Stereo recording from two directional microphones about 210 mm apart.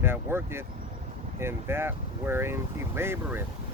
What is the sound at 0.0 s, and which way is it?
Speech, 10° right (ahead or behind).